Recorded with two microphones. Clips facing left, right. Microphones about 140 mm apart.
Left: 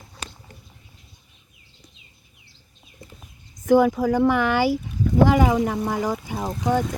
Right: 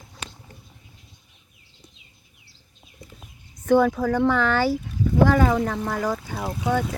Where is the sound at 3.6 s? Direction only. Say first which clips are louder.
Left 2 dB; 10° left (ahead or behind).